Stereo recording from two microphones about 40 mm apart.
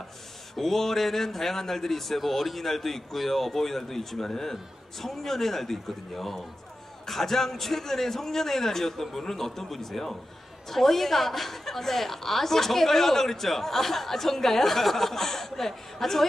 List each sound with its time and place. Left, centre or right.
0.5 s a man's voice: centre